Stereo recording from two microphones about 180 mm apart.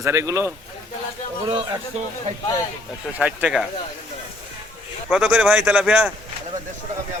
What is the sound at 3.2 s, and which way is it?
Speech, 5° right (ahead or behind).